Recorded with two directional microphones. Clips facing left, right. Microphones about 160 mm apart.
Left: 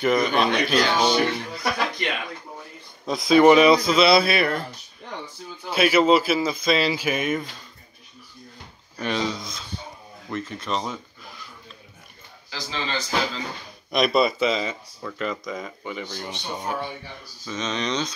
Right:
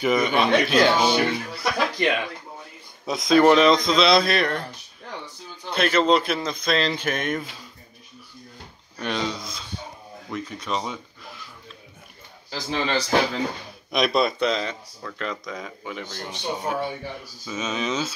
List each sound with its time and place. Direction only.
0.0 s speech: centre (ahead or behind)
3.1 s speech: centre (ahead or behind)
5.7 s speech: 5° left (ahead or behind)
8.9 s speech: centre (ahead or behind)
12.4 s speech: 50° right (ahead or behind)
13.9 s speech: centre (ahead or behind)